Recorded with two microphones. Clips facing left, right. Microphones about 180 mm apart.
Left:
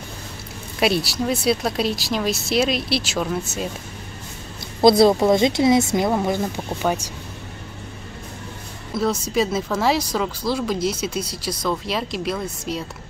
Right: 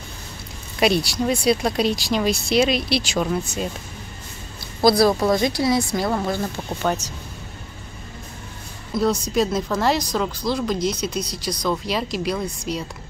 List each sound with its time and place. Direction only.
0.7 s speech: 5° left (ahead or behind)
4.8 s speech: 25° left (ahead or behind)
8.9 s speech: 5° left (ahead or behind)